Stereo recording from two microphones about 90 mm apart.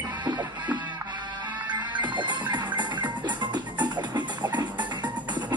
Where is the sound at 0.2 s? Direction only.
40° right (ahead or behind).